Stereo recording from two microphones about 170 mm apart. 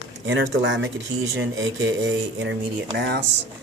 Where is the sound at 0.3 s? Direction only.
90° right.